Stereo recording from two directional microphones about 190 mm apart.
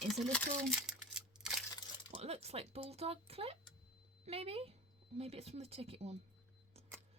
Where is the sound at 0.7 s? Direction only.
5° right (ahead or behind).